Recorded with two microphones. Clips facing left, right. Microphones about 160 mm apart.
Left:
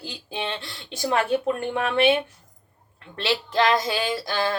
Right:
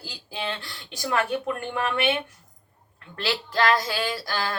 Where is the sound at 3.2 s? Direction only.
20° left (ahead or behind).